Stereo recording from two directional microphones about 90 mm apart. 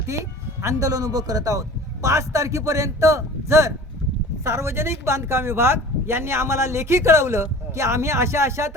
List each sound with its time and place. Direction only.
0.1 s a woman's voice: 35° right (ahead or behind)